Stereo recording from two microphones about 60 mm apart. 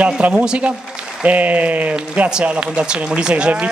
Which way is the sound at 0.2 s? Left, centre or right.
Right.